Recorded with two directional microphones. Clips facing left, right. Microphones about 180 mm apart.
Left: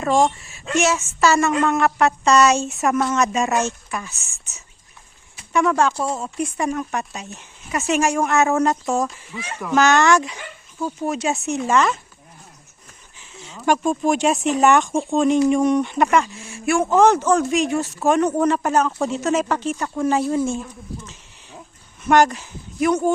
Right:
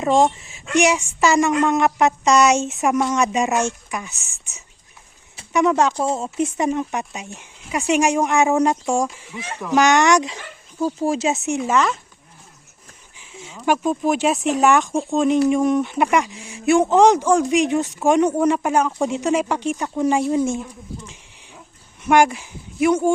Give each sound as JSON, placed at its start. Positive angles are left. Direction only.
{"t": 0.0, "sound": "speech", "side_deg": -20}
{"t": 5.5, "sound": "speech", "side_deg": -20}
{"t": 10.8, "sound": "speech", "side_deg": -30}
{"t": 13.1, "sound": "a sound", "side_deg": -10}
{"t": 13.7, "sound": "speech", "side_deg": -5}
{"t": 22.0, "sound": "speech", "side_deg": -10}